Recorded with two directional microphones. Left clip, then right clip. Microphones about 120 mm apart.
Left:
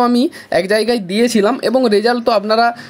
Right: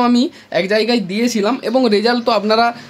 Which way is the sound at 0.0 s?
45° left (ahead or behind).